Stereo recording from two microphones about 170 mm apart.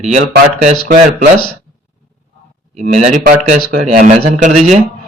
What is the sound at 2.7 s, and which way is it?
A man's voice, 45° right (ahead or behind).